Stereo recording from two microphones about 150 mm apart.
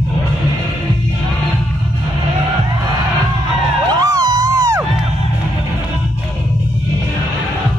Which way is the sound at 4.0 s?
25° right (ahead or behind).